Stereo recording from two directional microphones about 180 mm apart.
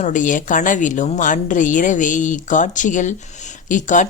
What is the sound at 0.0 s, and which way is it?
Speech, 45° left (ahead or behind).